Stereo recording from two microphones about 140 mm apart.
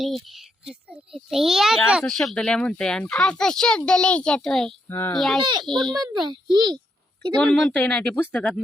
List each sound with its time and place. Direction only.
0.0 s a child's voice: centre (ahead or behind)
4.9 s a child's voice: 20° left (ahead or behind)
5.1 s a child's voice: centre (ahead or behind)
6.0 s a child's voice: 30° right (ahead or behind)
7.4 s speech: 10° left (ahead or behind)